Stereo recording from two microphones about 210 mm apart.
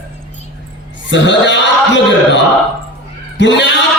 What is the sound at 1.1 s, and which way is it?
A man's voice, 60° left (ahead or behind).